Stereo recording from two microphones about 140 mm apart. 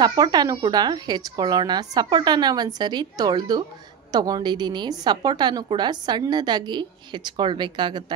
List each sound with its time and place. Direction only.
0.0 s a woman's voice: 30° right (ahead or behind)